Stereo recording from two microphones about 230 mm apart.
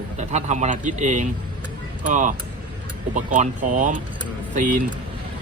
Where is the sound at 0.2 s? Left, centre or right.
Right.